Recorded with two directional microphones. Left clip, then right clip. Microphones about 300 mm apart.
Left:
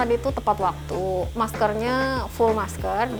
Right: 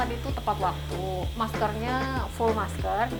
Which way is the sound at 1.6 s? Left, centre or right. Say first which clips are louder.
Left 8 dB; left.